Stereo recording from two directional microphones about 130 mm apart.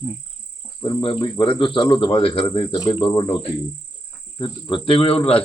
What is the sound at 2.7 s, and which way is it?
Cricket, 30° left (ahead or behind).